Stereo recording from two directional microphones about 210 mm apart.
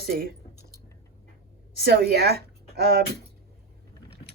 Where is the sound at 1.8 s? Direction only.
50° right (ahead or behind).